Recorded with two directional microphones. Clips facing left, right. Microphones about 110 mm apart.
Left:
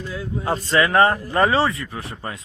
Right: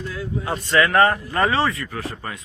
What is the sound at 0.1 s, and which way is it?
Speech, 20° left (ahead or behind).